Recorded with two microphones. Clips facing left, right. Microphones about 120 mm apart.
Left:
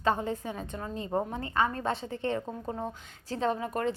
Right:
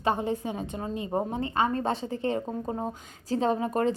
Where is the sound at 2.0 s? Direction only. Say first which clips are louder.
Right 3 dB; 35° right (ahead or behind).